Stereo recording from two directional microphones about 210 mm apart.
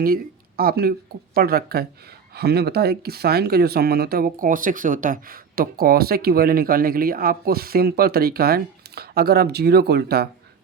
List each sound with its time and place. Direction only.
0.0 s speech: 45° right (ahead or behind)